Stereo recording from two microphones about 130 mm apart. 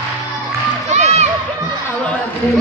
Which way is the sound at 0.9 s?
60° right (ahead or behind).